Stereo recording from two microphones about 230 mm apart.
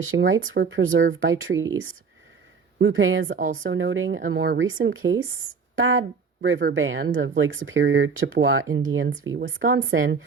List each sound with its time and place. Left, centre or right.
0.0 s speech: right
3.2 s a woman's voice: right
3.6 s speech: right